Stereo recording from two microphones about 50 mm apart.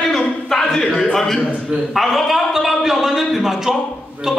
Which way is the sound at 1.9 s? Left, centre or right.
Centre.